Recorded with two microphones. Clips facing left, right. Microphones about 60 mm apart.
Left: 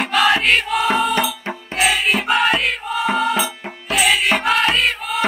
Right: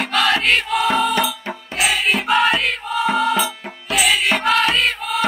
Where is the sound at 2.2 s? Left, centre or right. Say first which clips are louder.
Right 2 dB; centre.